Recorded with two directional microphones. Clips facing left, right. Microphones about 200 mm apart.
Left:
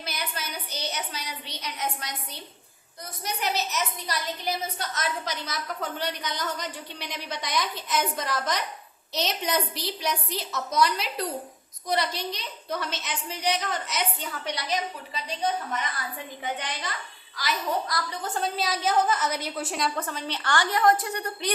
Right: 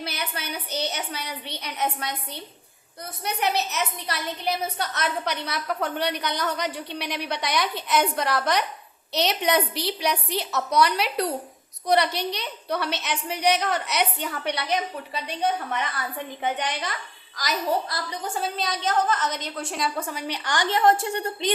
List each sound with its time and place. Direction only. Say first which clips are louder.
0.0 s a woman's voice: right 3 dB; 60° right (ahead or behind)
17.3 s a child's voice: right 3 dB; 40° right (ahead or behind)
17.8 s a woman's voice: even; 25° right (ahead or behind)
18.2 s a woman's voice: right 1 dB; 5° right (ahead or behind)
20.0 s a woman's voice: right 2 dB; 10° right (ahead or behind)